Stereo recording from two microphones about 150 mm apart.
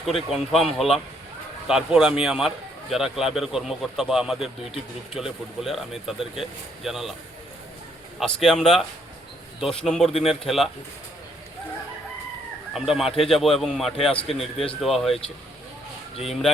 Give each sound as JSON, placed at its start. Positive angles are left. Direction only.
{"t": 0.0, "sound": "speech", "side_deg": 0}
{"t": 8.2, "sound": "speech", "side_deg": 5}
{"t": 12.7, "sound": "speech", "side_deg": 0}
{"t": 16.2, "sound": "speech", "side_deg": 0}